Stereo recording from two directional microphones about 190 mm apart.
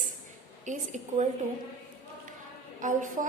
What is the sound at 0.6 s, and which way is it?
Speech, 40° right (ahead or behind).